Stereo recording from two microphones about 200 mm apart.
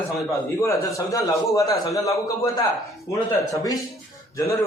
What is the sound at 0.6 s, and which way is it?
A man's voice, 15° left (ahead or behind).